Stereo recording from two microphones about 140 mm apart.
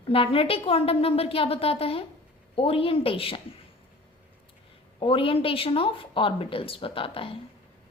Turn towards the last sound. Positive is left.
turn(degrees=40)  # may be behind; listen again after turning